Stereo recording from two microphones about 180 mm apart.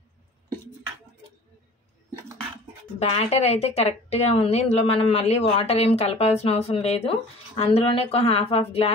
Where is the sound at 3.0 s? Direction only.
35° left (ahead or behind).